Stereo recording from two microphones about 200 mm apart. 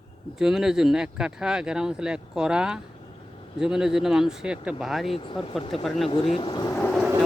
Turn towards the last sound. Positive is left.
turn(degrees=5)  # may be behind; listen again after turning